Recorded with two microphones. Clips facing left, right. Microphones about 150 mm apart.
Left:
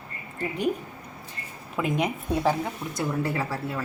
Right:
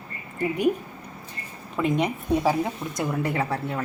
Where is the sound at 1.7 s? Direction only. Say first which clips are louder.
Right 2 dB; centre (ahead or behind).